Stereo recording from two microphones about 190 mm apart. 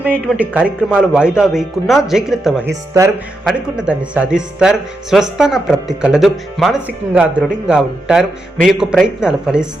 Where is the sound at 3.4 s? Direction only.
5° right (ahead or behind).